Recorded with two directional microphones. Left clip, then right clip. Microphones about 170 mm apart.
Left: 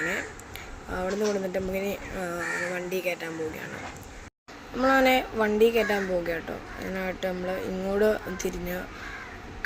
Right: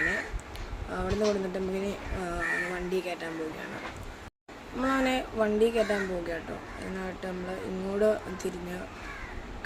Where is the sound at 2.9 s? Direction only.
10° left (ahead or behind).